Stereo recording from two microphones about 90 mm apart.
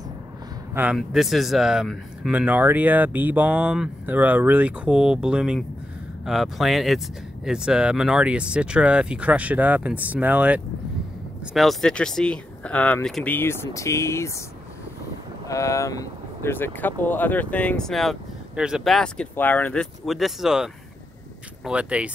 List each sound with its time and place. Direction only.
0.9 s speech: centre (ahead or behind)
2.3 s speech: 20° right (ahead or behind)
11.5 s speech: centre (ahead or behind)
13.2 s speech: 25° left (ahead or behind)
15.4 s speech: 35° left (ahead or behind)
16.4 s speech: 25° left (ahead or behind); by 18.1 s 5° left (ahead or behind)
18.6 s speech: 10° right (ahead or behind)
19.3 s speech: 20° left (ahead or behind)
20.1 s speech: centre (ahead or behind)